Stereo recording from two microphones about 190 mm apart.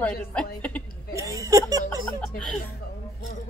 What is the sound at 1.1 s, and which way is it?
Speech, 15° right (ahead or behind).